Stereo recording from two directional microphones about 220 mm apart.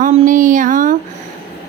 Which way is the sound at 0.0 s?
35° right (ahead or behind).